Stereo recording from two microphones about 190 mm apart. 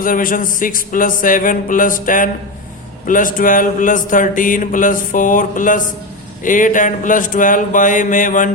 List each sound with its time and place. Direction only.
0.0 s speech: 45° left (ahead or behind)